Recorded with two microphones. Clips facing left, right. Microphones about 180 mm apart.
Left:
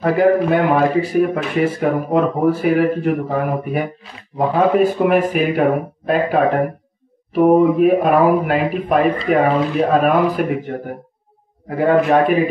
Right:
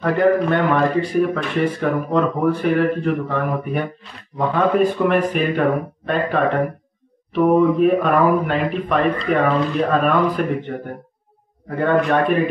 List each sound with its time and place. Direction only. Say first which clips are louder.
0.0 s a man's voice: left 2 dB; 5° left (ahead or behind)